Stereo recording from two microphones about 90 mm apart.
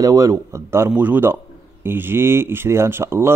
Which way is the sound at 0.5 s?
30° right (ahead or behind).